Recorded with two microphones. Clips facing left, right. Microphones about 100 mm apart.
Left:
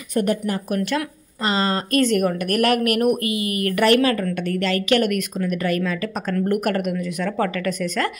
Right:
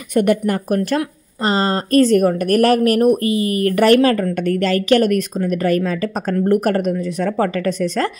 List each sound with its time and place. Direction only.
0.1 s speech: 70° right (ahead or behind)
0.7 s speech: 40° right (ahead or behind)